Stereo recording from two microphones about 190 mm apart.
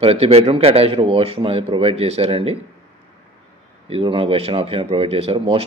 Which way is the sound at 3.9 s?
30° right (ahead or behind).